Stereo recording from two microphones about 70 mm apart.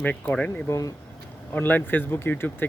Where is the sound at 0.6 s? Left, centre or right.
Left.